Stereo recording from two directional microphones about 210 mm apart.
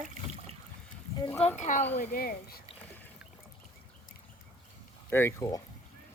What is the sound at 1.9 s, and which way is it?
Speech, 40° left (ahead or behind).